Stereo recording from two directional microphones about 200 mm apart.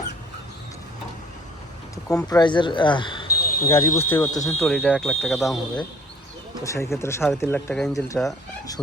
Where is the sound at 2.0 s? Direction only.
15° left (ahead or behind); by 5.5 s centre (ahead or behind).